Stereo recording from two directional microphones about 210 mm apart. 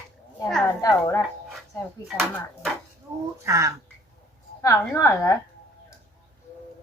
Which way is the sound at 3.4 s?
15° right (ahead or behind).